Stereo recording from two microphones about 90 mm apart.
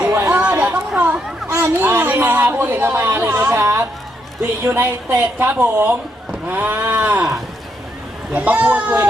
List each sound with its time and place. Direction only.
0.1 s chatter: 20° right (ahead or behind)
1.6 s speech: 25° right (ahead or behind)
3.3 s a woman's voice: 35° right (ahead or behind); by 7.3 s 20° right (ahead or behind)
8.3 s a child's voice: 15° right (ahead or behind)